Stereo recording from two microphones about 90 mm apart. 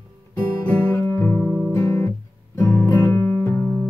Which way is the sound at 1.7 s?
30° left (ahead or behind).